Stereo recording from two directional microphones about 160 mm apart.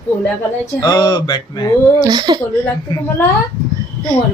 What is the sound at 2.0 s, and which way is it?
Speech, 25° right (ahead or behind).